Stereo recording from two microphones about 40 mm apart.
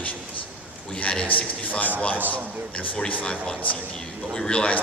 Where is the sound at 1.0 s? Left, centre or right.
Left.